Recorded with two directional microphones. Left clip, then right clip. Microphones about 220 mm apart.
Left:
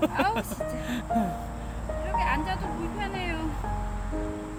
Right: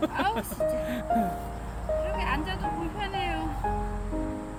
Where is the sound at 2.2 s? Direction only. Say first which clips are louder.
Left 3 dB; 5° left (ahead or behind).